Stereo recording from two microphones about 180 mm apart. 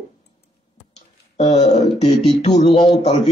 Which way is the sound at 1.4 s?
25° left (ahead or behind).